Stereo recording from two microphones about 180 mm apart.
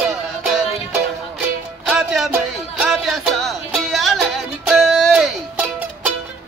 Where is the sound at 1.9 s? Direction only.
5° right (ahead or behind).